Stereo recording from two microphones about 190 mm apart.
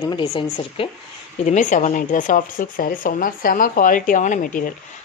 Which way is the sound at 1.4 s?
40° left (ahead or behind).